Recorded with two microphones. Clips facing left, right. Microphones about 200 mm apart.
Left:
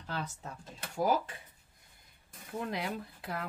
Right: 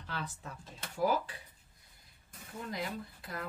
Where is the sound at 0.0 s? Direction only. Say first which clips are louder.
Left 3 dB; 40° left (ahead or behind).